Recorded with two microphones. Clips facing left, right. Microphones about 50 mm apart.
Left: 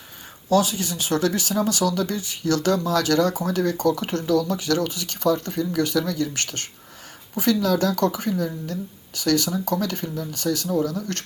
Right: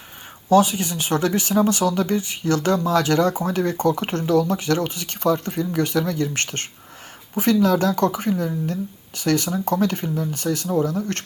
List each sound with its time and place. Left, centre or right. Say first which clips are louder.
0.5 s speech: right 4 dB; right